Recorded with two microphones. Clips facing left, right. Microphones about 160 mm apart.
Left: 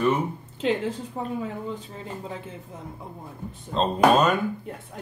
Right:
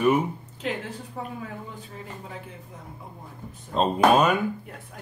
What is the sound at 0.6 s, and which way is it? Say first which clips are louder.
Speech: left 7 dB; 25° left (ahead or behind).